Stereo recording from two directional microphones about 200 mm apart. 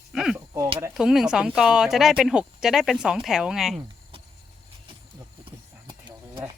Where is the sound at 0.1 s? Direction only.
Centre (ahead or behind).